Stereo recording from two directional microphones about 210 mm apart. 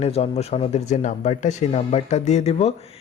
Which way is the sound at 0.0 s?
30° left (ahead or behind).